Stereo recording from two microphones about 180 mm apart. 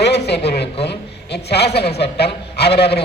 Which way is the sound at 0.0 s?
65° left (ahead or behind).